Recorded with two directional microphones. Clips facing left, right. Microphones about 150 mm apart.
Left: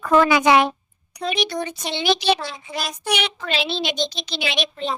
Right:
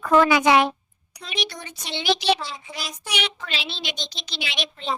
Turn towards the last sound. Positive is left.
turn(degrees=55)  # may be behind; listen again after turning